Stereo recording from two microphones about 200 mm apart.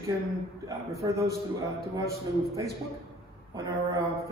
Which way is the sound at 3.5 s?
15° right (ahead or behind).